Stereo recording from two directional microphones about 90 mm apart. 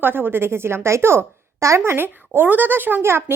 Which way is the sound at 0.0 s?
20° right (ahead or behind).